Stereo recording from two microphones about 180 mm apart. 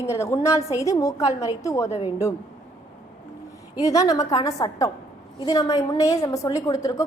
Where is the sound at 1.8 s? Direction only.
35° left (ahead or behind).